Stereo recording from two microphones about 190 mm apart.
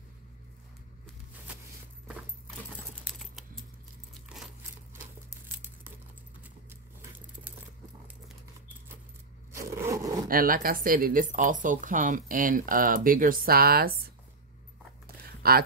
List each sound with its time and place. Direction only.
3.1 s typing: centre (ahead or behind)
9.6 s scrape: 15° right (ahead or behind)
10.2 s speech: 50° right (ahead or behind)
15.0 s a sound: 55° right (ahead or behind)